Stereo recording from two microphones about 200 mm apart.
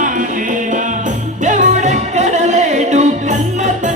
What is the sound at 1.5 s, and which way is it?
Music, 35° right (ahead or behind).